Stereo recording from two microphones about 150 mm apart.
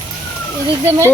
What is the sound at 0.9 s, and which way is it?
Speech, 20° right (ahead or behind).